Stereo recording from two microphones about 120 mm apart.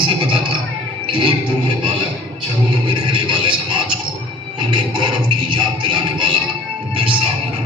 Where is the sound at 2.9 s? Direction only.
45° right (ahead or behind).